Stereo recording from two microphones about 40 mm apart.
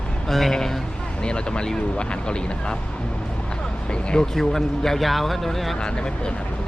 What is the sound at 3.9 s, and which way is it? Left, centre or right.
Speech, left.